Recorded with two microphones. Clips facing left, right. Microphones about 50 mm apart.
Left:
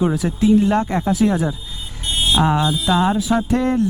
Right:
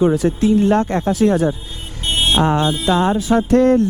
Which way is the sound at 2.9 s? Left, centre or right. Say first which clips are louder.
Right 2 dB; centre.